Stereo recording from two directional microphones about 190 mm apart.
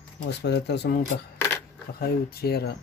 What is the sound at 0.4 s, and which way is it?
Speech, 60° left (ahead or behind).